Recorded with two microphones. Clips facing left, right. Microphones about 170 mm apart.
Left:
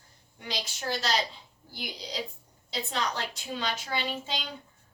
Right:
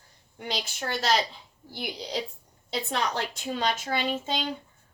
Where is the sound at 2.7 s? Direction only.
55° right (ahead or behind).